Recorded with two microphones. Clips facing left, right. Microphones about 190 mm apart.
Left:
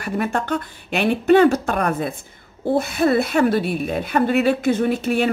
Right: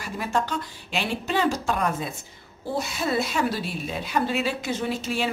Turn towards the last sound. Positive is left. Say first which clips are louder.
# left 8 dB
turn(degrees=55)  # may be behind; listen again after turning